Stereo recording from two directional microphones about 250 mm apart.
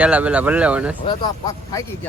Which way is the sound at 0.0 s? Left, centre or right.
Centre.